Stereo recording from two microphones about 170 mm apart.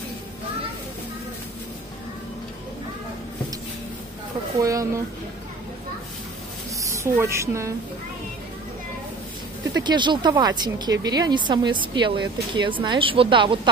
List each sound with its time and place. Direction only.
4.6 s speech: 20° right (ahead or behind)
7.0 s speech: 15° right (ahead or behind)
9.8 s speech: 25° right (ahead or behind)